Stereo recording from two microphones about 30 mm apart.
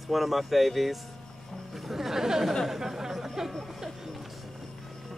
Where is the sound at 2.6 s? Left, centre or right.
Centre.